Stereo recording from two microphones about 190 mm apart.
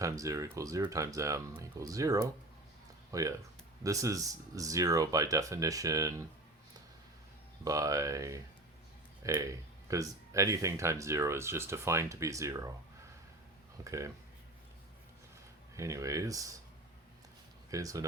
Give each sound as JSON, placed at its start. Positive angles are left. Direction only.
{"t": 0.0, "sound": "speech", "side_deg": -15}
{"t": 7.6, "sound": "speech", "side_deg": -20}
{"t": 13.8, "sound": "speech", "side_deg": -15}
{"t": 15.7, "sound": "speech", "side_deg": -15}
{"t": 17.7, "sound": "speech", "side_deg": -15}